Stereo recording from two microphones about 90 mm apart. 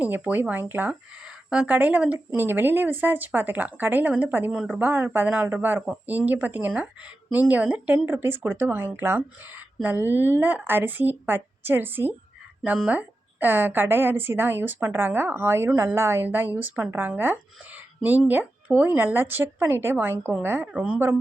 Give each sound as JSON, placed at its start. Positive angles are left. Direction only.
{"t": 0.0, "sound": "speech", "side_deg": -20}
{"t": 1.2, "sound": "speech", "side_deg": -10}
{"t": 4.5, "sound": "speech", "side_deg": -5}
{"t": 4.8, "sound": "speech", "side_deg": -20}
{"t": 20.7, "sound": "speech", "side_deg": -15}